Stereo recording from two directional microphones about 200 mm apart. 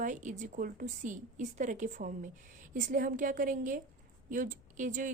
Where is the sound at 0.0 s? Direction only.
40° right (ahead or behind).